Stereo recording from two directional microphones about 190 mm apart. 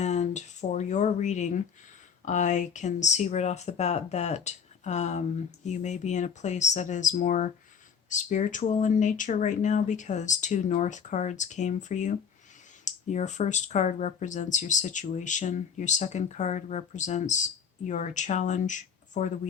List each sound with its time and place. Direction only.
0.0 s speech: 35° left (ahead or behind)